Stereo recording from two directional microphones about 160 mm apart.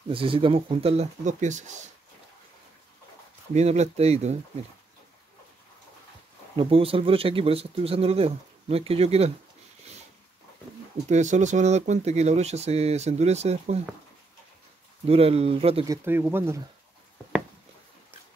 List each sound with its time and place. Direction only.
0.1 s speech: 35° right (ahead or behind)
3.5 s speech: 45° right (ahead or behind)
6.5 s speech: 35° right (ahead or behind)
11.1 s speech: 45° right (ahead or behind)
15.0 s speech: 40° right (ahead or behind)
15.8 s speech: 20° right (ahead or behind)